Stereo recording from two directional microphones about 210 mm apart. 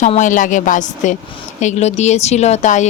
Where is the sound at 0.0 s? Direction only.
35° left (ahead or behind).